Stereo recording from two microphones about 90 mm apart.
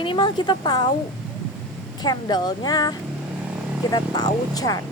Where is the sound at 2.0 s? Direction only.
50° left (ahead or behind).